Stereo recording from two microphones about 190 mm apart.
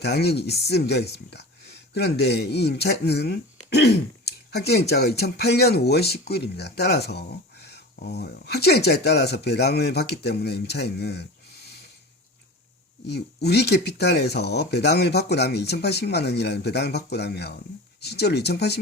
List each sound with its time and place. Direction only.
0.0 s speech: 60° left (ahead or behind)
13.1 s speech: 60° left (ahead or behind)